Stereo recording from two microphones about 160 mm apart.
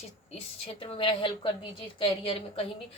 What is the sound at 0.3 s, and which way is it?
Speech, 35° left (ahead or behind).